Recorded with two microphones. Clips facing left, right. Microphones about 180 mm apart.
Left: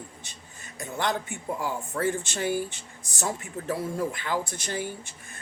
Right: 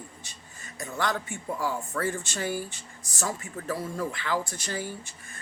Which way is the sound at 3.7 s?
20° left (ahead or behind).